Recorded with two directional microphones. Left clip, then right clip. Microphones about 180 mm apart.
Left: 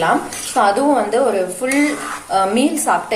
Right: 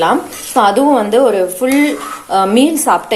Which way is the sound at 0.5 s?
45° right (ahead or behind).